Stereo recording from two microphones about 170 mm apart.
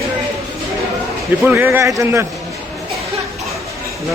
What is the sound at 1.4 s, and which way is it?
Speech, 15° right (ahead or behind).